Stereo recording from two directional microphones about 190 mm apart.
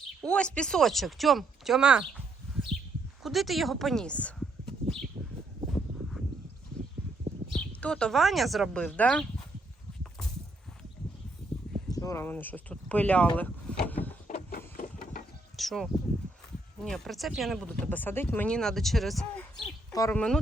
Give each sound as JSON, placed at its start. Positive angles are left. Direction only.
{"t": 0.2, "sound": "speech", "side_deg": 5}
{"t": 3.2, "sound": "speech", "side_deg": 0}
{"t": 7.8, "sound": "speech", "side_deg": 5}
{"t": 11.4, "sound": "a sound", "side_deg": 5}
{"t": 11.9, "sound": "speech", "side_deg": 20}
{"t": 14.8, "sound": "a sound", "side_deg": 45}
{"t": 15.5, "sound": "speech", "side_deg": 0}
{"t": 19.9, "sound": "speech", "side_deg": 20}
{"t": 20.1, "sound": "speech", "side_deg": 5}